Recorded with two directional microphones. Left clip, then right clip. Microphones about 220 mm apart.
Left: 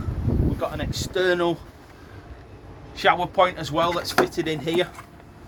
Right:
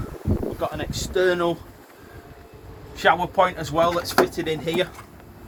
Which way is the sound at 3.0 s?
45° left (ahead or behind).